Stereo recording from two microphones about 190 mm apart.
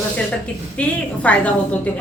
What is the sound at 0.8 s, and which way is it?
Speech, 5° left (ahead or behind).